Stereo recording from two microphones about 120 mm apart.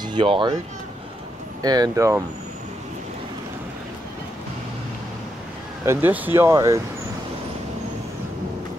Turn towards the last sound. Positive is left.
turn(degrees=-25)  # may be behind; listen again after turning